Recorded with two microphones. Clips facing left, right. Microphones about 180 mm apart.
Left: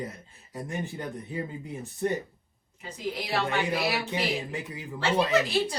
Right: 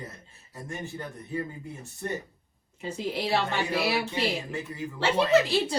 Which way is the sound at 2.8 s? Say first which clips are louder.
Right 3 dB; 25° right (ahead or behind).